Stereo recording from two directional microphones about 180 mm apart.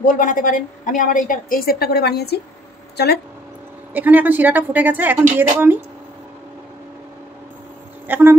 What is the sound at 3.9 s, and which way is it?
A woman's voice, 10° right (ahead or behind).